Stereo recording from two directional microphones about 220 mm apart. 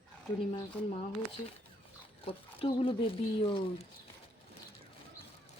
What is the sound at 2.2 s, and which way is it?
Speech, 25° left (ahead or behind).